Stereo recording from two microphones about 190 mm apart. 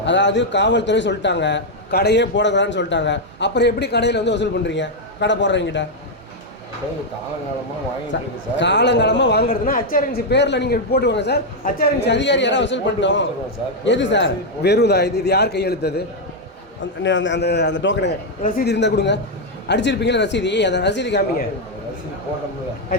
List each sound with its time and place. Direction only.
0.0 s a man's voice: 70° left (ahead or behind)
8.1 s a man's voice: 70° left (ahead or behind)
17.0 s a man's voice: 75° left (ahead or behind)
18.4 s a man's voice: 50° left (ahead or behind)